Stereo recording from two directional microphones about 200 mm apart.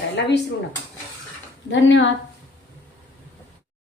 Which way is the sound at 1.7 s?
65° left (ahead or behind).